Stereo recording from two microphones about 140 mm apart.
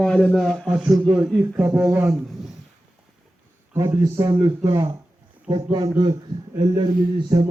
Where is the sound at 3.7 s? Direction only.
30° right (ahead or behind).